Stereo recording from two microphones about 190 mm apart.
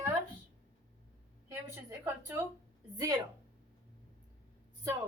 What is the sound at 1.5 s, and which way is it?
Speech, 15° right (ahead or behind).